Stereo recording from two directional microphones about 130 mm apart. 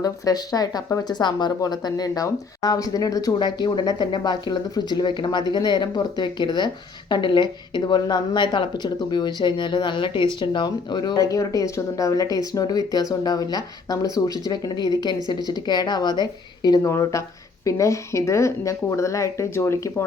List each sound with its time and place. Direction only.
0.0 s a woman's voice: 30° left (ahead or behind)